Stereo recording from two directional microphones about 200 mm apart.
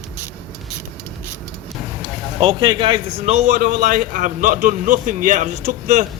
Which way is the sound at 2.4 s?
25° right (ahead or behind).